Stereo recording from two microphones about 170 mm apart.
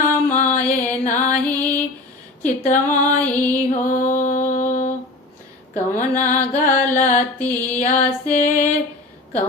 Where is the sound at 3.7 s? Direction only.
45° left (ahead or behind).